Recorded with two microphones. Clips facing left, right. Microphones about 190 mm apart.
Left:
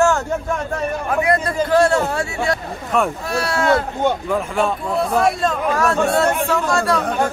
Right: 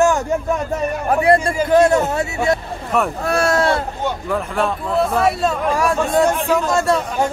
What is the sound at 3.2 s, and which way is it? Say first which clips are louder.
Speech: right 5 dB; 50° right (ahead or behind).